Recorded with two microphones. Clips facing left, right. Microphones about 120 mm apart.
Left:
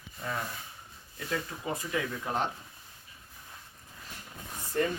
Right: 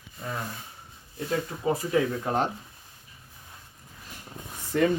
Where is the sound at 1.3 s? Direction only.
35° right (ahead or behind).